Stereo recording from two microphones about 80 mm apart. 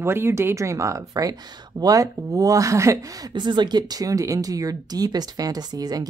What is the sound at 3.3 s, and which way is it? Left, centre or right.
Speech, right.